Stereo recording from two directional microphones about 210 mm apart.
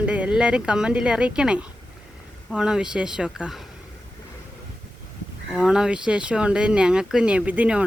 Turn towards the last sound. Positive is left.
turn(degrees=-5)  # may be behind; listen again after turning